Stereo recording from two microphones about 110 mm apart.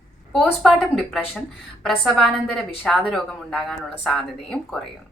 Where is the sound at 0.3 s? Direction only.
Centre (ahead or behind).